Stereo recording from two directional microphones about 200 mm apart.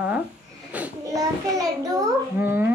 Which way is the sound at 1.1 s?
15° right (ahead or behind).